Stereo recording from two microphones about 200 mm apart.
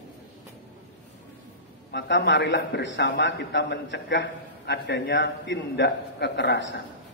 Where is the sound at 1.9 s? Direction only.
60° left (ahead or behind).